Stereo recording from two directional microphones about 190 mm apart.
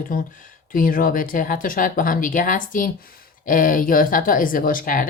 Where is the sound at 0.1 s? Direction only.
45° left (ahead or behind).